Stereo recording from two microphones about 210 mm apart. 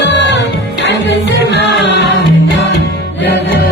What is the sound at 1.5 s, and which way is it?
Music, 55° left (ahead or behind).